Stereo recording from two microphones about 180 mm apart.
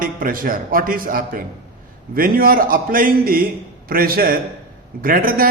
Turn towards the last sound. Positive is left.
turn(degrees=-50)  # may be behind; listen again after turning